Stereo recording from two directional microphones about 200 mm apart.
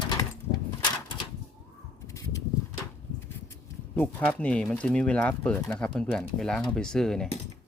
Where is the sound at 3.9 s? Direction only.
5° left (ahead or behind).